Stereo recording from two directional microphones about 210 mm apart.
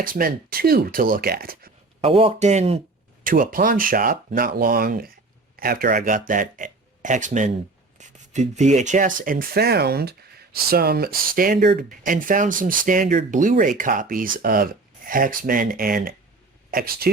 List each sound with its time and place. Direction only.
0.0 s speech: 45° right (ahead or behind)
2.0 s speech: 25° right (ahead or behind); by 17.1 s 45° right (ahead or behind)